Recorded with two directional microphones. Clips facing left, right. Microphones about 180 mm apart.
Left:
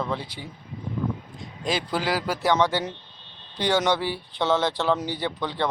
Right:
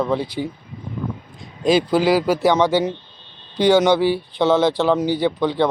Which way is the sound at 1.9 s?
10° right (ahead or behind).